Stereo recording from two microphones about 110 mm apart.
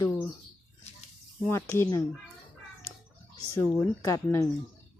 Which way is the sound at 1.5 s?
25° left (ahead or behind).